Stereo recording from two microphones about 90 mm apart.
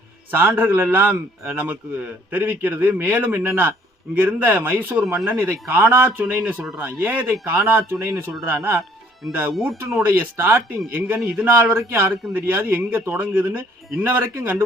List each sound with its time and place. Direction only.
0.3 s a man's voice: 20° right (ahead or behind)
10.1 s a man's voice: 25° right (ahead or behind)